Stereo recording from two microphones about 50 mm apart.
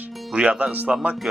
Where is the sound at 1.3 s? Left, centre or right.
Centre.